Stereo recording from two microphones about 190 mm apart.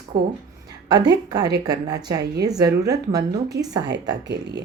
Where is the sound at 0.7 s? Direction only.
20° right (ahead or behind).